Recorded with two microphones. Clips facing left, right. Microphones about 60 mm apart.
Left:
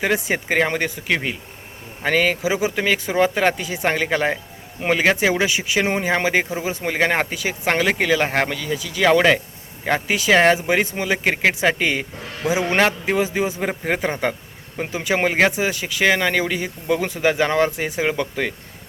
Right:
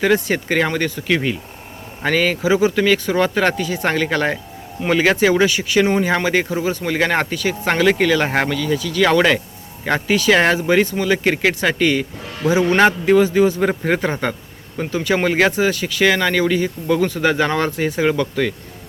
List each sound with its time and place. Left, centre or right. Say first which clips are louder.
0.0 s speech: right 4 dB; centre
14.8 s speech: right 2 dB; centre